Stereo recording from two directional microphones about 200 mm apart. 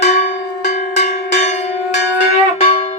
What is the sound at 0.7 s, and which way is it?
Cowbell, 35° left (ahead or behind).